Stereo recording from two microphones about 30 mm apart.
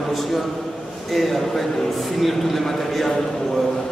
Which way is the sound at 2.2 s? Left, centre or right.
Centre.